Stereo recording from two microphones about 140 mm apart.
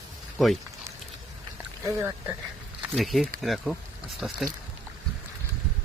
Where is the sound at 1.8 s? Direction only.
20° right (ahead or behind).